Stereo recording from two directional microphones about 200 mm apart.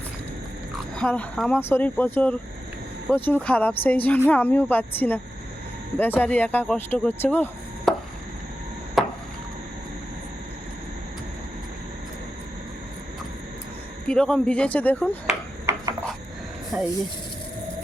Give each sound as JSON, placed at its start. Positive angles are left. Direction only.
{"t": 0.9, "sound": "speech", "side_deg": 5}
{"t": 9.0, "sound": "chop", "side_deg": 0}
{"t": 14.1, "sound": "speech", "side_deg": 5}
{"t": 15.7, "sound": "a sound", "side_deg": -10}
{"t": 16.7, "sound": "speech", "side_deg": 0}